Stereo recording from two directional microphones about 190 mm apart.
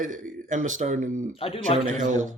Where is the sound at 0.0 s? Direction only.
40° right (ahead or behind).